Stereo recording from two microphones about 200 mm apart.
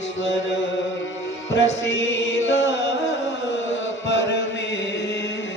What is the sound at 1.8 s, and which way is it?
Music, 65° left (ahead or behind).